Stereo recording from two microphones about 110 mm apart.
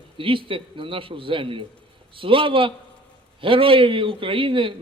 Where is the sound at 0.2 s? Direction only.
50° right (ahead or behind).